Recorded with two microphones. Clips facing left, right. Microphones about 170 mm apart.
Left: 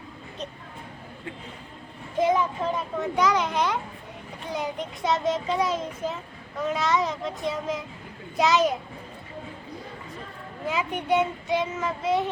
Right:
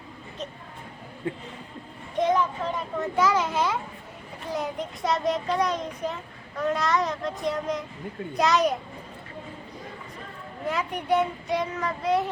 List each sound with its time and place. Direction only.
1.2 s speech: 35° right (ahead or behind)
2.1 s a child's voice: 5° left (ahead or behind)
10.7 s a child's voice: centre (ahead or behind)